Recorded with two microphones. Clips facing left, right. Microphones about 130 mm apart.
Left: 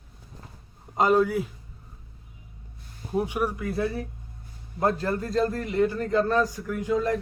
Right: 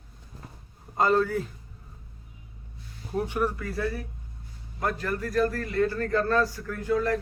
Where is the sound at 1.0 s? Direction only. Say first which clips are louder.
Left 2 dB; 15° left (ahead or behind).